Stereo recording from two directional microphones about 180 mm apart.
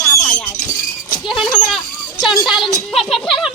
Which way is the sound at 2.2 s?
Centre (ahead or behind).